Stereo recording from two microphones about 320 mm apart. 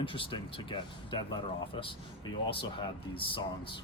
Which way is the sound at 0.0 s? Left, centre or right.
Centre.